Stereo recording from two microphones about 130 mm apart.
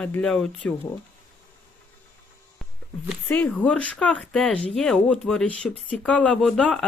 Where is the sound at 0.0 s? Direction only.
10° left (ahead or behind).